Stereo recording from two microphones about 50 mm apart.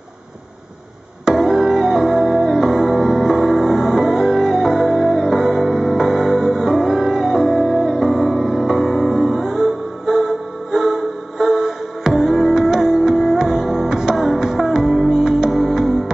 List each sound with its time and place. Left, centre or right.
1.2 s music: centre